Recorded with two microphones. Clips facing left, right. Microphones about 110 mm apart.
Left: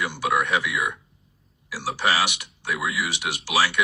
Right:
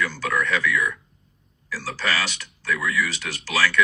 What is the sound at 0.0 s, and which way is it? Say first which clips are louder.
Speech: left 1 dB; 15° left (ahead or behind).